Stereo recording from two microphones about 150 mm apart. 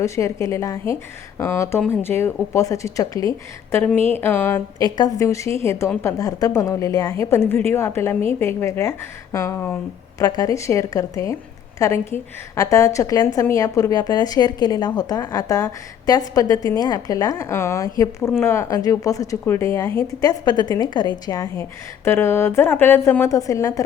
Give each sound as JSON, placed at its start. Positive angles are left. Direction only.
{"t": 0.0, "sound": "a woman's voice", "side_deg": 20}
{"t": 4.8, "sound": "a woman's voice", "side_deg": 25}